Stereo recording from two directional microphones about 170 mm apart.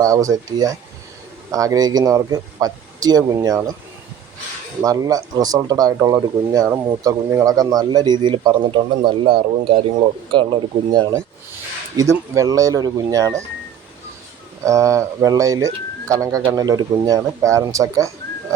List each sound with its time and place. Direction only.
0.0 s speech: 20° right (ahead or behind)
4.8 s speech: 20° right (ahead or behind)
14.6 s speech: 20° right (ahead or behind)